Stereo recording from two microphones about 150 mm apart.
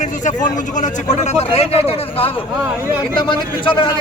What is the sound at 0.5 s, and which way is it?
A man's voice, 55° left (ahead or behind).